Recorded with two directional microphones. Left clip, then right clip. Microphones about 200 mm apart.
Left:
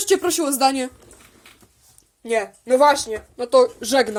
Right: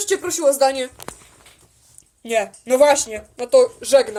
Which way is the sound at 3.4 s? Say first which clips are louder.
Right 1 dB; 10° left (ahead or behind).